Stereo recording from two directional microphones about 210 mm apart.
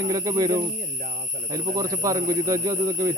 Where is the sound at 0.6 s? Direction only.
40° right (ahead or behind).